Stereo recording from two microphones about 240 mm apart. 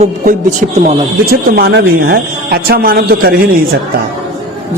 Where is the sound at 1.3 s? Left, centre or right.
Right.